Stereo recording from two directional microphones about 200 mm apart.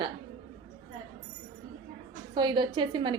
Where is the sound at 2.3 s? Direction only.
20° right (ahead or behind).